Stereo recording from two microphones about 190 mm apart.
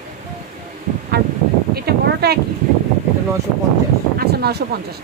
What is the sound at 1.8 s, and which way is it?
Speech, 55° right (ahead or behind).